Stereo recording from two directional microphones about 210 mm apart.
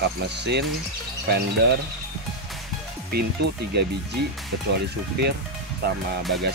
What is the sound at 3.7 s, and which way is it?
Speech, 50° right (ahead or behind).